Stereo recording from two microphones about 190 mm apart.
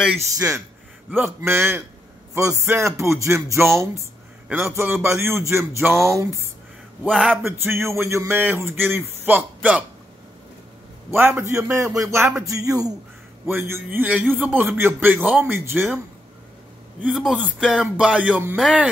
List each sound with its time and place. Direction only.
1.1 s speech: 10° right (ahead or behind)
7.1 s speech: centre (ahead or behind)
7.4 s speech: 15° right (ahead or behind)
11.1 s speech: 10° right (ahead or behind)
17.0 s speech: 5° right (ahead or behind)